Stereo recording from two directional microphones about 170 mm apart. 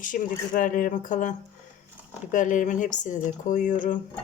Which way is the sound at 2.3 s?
50° left (ahead or behind).